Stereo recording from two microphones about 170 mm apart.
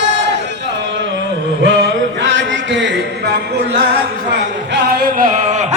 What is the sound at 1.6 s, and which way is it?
Music, 90° right.